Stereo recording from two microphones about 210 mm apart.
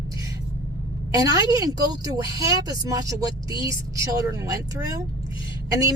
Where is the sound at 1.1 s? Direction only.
15° right (ahead or behind).